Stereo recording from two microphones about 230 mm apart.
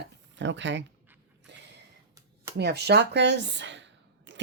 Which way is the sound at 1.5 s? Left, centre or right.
Right.